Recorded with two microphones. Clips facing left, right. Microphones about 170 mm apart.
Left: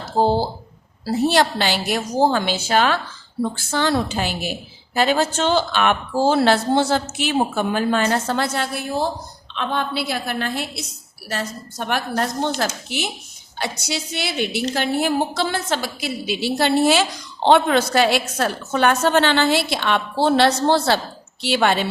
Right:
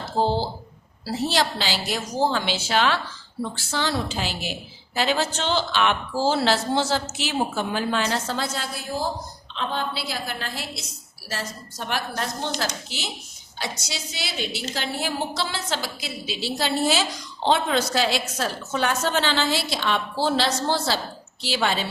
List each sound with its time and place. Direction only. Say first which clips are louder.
0.2 s a woman's voice: left 5 dB; 45° left (ahead or behind)
13.6 s a woman's voice: left 6 dB; 60° left (ahead or behind)